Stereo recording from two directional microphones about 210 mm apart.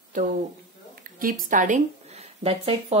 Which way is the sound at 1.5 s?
40° right (ahead or behind).